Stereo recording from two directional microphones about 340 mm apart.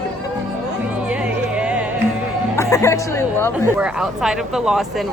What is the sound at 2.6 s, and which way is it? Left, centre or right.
Speech, centre.